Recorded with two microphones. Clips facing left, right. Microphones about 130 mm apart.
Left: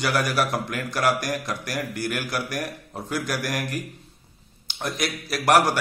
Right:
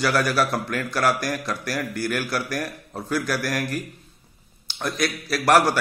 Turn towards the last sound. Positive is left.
turn(degrees=20)  # may be behind; listen again after turning